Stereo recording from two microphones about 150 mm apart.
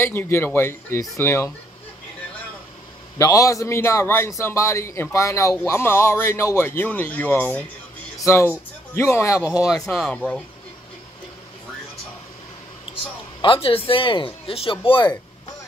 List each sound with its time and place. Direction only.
0.0 s speech: 15° left (ahead or behind)
3.2 s speech: 20° left (ahead or behind)
9.8 s speech: 5° left (ahead or behind)
13.4 s speech: 35° left (ahead or behind)